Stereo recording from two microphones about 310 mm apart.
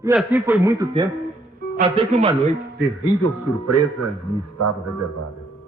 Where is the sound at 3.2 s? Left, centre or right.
Right.